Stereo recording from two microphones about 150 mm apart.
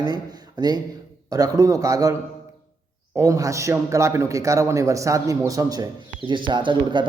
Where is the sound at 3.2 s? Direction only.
20° right (ahead or behind).